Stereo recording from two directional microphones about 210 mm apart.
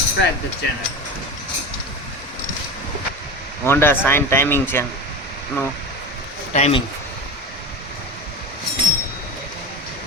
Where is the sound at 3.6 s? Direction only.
10° left (ahead or behind).